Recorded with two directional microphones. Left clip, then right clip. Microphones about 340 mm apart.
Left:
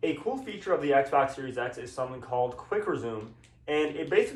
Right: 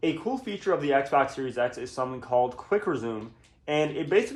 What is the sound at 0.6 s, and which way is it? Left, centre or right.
Speech, right.